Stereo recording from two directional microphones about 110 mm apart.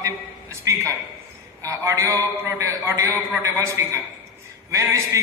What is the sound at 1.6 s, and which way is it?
A man's voice, 25° right (ahead or behind).